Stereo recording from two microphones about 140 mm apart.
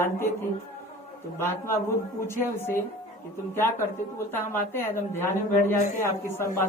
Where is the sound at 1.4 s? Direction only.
15° left (ahead or behind).